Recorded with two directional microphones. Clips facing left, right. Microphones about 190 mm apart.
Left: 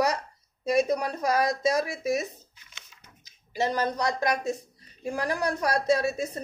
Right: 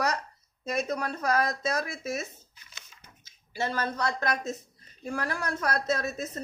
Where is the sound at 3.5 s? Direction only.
15° left (ahead or behind).